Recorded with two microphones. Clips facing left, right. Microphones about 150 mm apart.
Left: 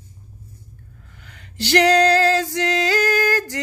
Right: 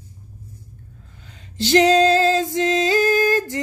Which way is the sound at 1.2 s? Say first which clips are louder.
Right 4 dB; 20° right (ahead or behind).